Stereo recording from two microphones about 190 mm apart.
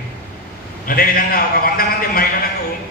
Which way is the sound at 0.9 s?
50° left (ahead or behind).